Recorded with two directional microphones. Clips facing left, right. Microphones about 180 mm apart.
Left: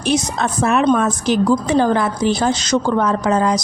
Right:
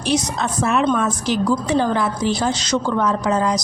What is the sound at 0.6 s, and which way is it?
A woman's voice, 55° left (ahead or behind).